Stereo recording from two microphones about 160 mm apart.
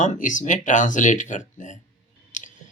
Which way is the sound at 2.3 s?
55° left (ahead or behind).